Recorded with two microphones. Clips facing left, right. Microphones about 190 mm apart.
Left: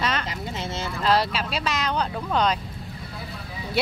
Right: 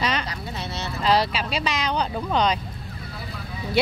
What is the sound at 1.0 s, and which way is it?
Speech, centre (ahead or behind).